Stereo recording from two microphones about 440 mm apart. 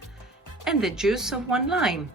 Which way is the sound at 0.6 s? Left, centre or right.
Centre.